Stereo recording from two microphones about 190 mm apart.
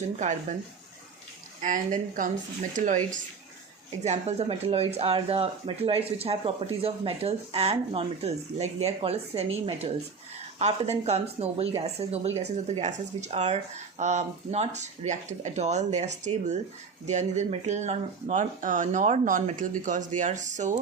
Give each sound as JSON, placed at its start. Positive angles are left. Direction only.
{"t": 0.2, "sound": "speech", "side_deg": -40}
{"t": 1.6, "sound": "a woman's voice", "side_deg": -45}
{"t": 10.6, "sound": "speech", "side_deg": -35}